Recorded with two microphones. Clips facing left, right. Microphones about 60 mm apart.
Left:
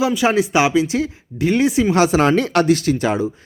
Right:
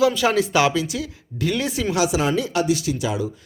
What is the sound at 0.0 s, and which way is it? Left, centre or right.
Speech, left.